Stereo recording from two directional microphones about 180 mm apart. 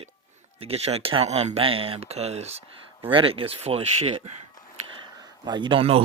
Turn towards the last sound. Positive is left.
turn(degrees=-30)  # may be behind; listen again after turning